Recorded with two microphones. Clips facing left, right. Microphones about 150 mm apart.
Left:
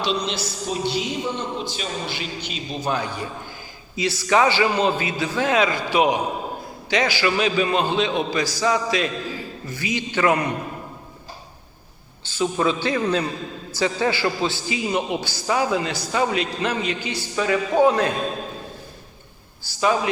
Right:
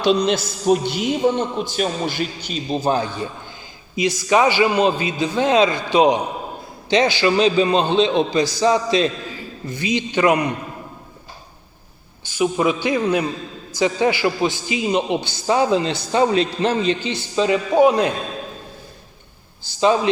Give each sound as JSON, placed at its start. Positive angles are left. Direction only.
{"t": 0.3, "sound": "a man's voice", "side_deg": -50}
{"t": 3.9, "sound": "a man's voice", "side_deg": -15}
{"t": 12.2, "sound": "a man's voice", "side_deg": -15}
{"t": 19.6, "sound": "a man's voice", "side_deg": -25}